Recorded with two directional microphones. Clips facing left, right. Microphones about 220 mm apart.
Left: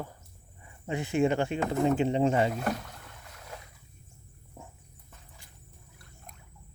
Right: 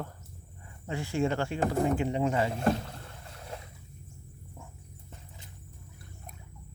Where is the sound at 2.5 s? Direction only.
30° right (ahead or behind).